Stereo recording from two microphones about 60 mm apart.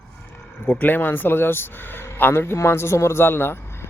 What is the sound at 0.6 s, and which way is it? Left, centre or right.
Speech, left.